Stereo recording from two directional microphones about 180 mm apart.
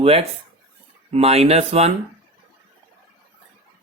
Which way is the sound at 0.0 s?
30° right (ahead or behind).